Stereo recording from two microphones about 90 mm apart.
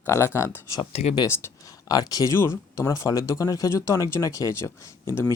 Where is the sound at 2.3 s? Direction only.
30° left (ahead or behind).